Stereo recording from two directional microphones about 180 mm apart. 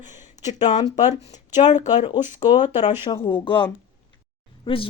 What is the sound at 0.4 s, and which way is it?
Speech, 40° left (ahead or behind).